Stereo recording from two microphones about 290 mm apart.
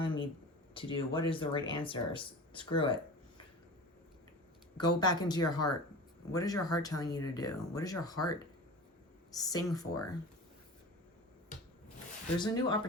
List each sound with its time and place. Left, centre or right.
0.0 s a sound: centre
0.7 s speech: centre
2.7 s a sound: centre
4.8 s speech: centre
9.3 s speech: centre
12.4 s speech: centre